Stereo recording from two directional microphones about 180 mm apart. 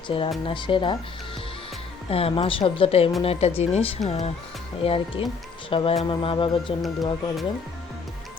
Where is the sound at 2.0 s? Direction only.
30° left (ahead or behind).